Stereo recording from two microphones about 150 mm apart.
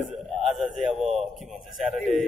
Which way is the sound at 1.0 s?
50° right (ahead or behind).